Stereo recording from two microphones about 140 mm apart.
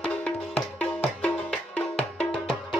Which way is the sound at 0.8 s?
10° left (ahead or behind).